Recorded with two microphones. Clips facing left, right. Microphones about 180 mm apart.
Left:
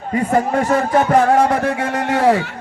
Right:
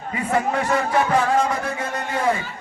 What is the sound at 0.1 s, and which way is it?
A man's voice, 40° left (ahead or behind).